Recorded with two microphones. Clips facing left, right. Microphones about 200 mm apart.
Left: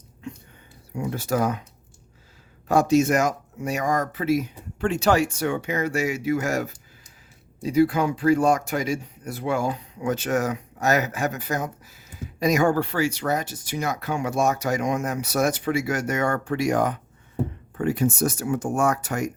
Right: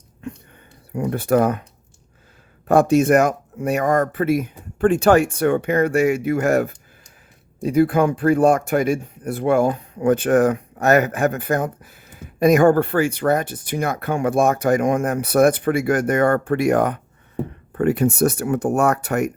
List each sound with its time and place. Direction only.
0.9 s speech: 60° right (ahead or behind)
2.6 s speech: 55° right (ahead or behind)